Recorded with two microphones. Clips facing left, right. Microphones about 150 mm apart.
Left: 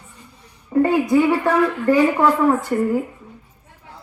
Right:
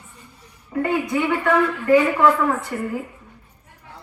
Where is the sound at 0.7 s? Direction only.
35° left (ahead or behind).